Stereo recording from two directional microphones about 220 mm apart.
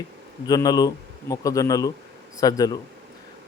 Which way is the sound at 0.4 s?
15° left (ahead or behind).